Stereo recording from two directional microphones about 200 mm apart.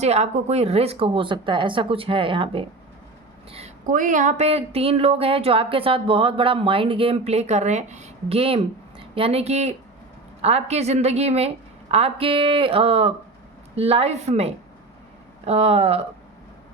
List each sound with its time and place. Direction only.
0.0 s a woman's voice: 35° right (ahead or behind)